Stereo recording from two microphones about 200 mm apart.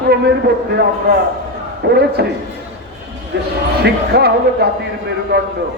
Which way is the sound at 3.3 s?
55° right (ahead or behind).